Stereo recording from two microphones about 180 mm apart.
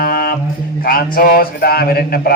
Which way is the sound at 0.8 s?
55° left (ahead or behind).